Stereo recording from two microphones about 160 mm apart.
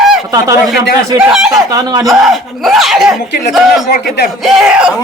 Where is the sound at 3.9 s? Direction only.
70° left (ahead or behind).